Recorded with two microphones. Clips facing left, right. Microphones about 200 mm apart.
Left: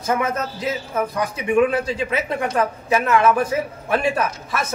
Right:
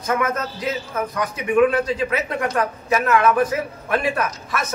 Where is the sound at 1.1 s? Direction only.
30° left (ahead or behind).